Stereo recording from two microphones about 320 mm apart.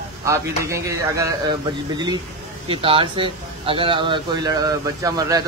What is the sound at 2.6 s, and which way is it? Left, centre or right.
Speech, centre.